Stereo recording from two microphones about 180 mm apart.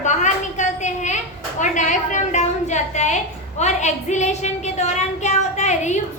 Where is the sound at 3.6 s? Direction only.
40° left (ahead or behind).